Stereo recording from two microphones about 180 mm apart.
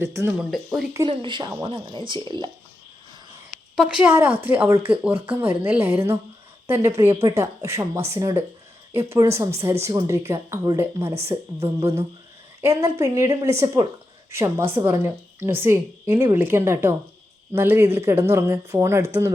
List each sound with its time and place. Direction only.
0.0 s a woman's voice: 15° right (ahead or behind)
0.3 s speech: centre (ahead or behind)
0.9 s speech: 25° right (ahead or behind)
3.8 s a woman's voice: 5° right (ahead or behind)